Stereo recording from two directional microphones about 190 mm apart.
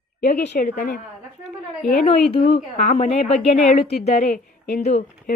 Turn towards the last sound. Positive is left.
turn(degrees=35)  # may be behind; listen again after turning